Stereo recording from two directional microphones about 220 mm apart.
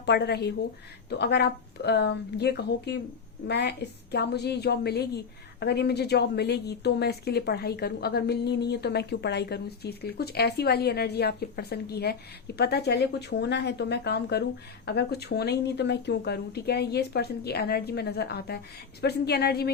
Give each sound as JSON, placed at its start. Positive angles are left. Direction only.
{"t": 0.0, "sound": "a woman's voice", "side_deg": 50}